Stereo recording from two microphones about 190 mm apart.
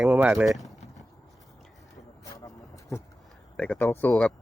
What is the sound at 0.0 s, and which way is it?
Speech, 5° right (ahead or behind).